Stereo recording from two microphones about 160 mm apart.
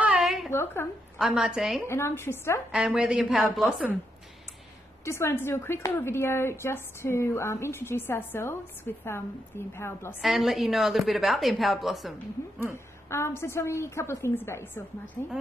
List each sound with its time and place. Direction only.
0.0 s a sound: 5° right (ahead or behind)
0.5 s a woman's voice: 15° left (ahead or behind)
1.1 s a woman's voice: 5° right (ahead or behind)
1.9 s a woman's voice: 15° left (ahead or behind)
2.7 s a woman's voice: 5° right (ahead or behind)
5.0 s a woman's voice: 15° left (ahead or behind)
10.2 s a woman's voice: centre (ahead or behind)
12.7 s a woman's voice: 15° left (ahead or behind)